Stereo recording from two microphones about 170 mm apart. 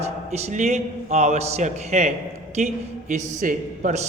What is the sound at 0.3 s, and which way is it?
A man's voice, 40° right (ahead or behind).